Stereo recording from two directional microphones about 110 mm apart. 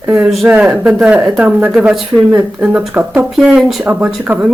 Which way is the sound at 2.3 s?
20° right (ahead or behind).